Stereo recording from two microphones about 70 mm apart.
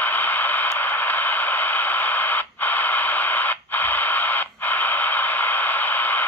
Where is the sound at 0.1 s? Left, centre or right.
Left.